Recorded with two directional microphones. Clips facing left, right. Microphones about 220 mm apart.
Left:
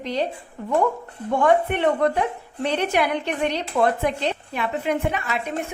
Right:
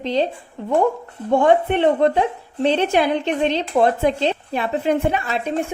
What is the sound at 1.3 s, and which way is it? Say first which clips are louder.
A woman's voice: right 4 dB; 25° right (ahead or behind).